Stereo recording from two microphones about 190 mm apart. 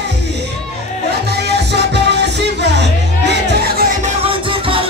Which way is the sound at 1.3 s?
65° right (ahead or behind).